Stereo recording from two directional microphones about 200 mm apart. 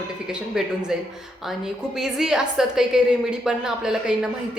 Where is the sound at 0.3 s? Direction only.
5° right (ahead or behind).